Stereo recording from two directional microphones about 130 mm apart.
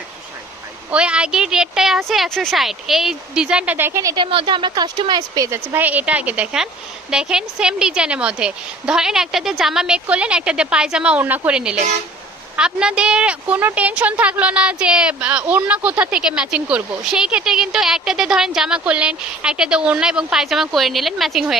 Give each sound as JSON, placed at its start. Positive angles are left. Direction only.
{"t": 0.9, "sound": "speech", "side_deg": -10}
{"t": 4.1, "sound": "speech", "side_deg": -40}
{"t": 5.7, "sound": "a woman's voice", "side_deg": -10}